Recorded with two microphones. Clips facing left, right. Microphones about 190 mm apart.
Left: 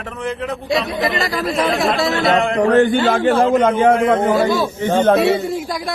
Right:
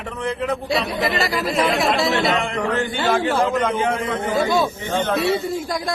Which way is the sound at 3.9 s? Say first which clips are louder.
Left 9 dB; 90° left.